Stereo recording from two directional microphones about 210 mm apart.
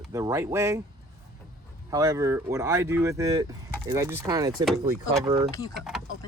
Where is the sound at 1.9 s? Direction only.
15° right (ahead or behind).